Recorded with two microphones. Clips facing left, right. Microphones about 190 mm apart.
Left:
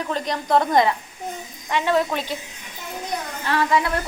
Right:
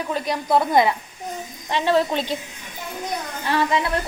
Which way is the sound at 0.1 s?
5° right (ahead or behind).